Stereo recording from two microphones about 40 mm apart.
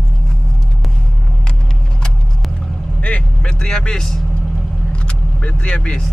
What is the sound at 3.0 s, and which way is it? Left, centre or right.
Vehicle, left.